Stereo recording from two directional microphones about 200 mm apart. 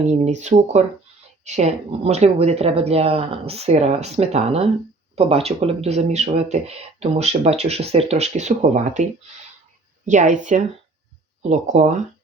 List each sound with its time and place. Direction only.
0.1 s speech: 35° right (ahead or behind)
10.1 s speech: 40° right (ahead or behind)